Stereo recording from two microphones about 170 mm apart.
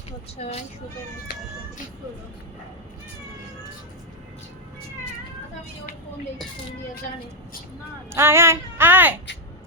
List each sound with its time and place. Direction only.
0.4 s speech: 45° left (ahead or behind)
8.1 s speech: 15° right (ahead or behind)